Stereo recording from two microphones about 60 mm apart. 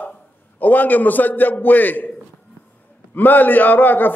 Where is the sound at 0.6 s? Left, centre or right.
Left.